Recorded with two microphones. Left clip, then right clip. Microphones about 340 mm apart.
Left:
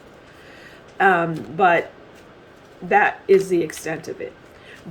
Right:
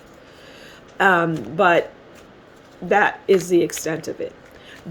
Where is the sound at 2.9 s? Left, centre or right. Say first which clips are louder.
Left 1 dB; right.